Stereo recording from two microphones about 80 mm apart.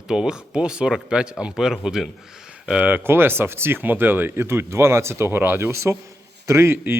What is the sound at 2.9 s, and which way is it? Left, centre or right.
Speech, right.